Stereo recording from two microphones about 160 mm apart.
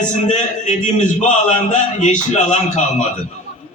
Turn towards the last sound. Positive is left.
turn(degrees=50)  # may be behind; listen again after turning